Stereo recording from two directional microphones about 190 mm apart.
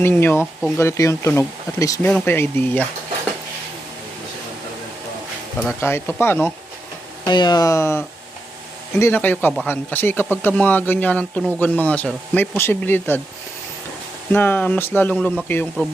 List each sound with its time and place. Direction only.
0.0 s speech: 10° left (ahead or behind)
5.8 s speech: 10° left (ahead or behind)
7.3 s speech: 20° left (ahead or behind)
14.3 s speech: 10° left (ahead or behind)